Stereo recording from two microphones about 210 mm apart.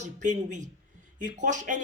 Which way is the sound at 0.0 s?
35° right (ahead or behind).